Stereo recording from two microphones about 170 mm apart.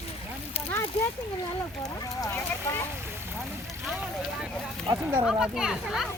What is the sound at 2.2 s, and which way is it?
Speech, 15° left (ahead or behind).